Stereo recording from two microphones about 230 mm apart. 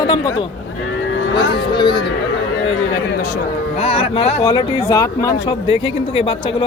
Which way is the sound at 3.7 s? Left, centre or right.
Left.